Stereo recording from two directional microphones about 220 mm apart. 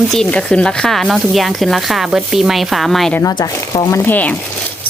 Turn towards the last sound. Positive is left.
turn(degrees=5)  # may be behind; listen again after turning